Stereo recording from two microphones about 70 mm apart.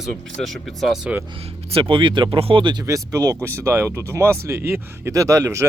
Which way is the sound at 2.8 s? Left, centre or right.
Right.